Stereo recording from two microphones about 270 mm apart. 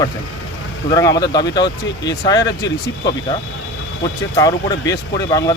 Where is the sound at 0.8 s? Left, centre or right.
Centre.